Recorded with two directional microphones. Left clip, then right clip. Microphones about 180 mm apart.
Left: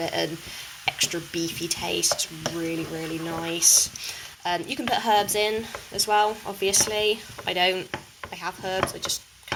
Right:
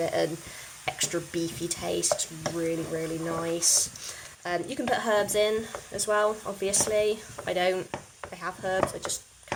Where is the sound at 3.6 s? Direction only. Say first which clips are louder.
Left 6 dB; 20° right (ahead or behind).